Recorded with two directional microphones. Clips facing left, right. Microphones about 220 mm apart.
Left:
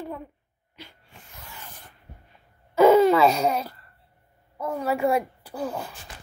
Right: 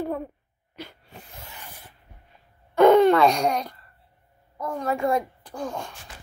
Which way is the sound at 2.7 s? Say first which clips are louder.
Right 1 dB; 5° left (ahead or behind).